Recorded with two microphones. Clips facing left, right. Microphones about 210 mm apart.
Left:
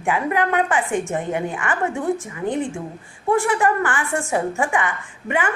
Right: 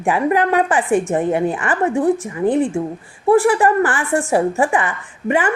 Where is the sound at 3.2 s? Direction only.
35° right (ahead or behind).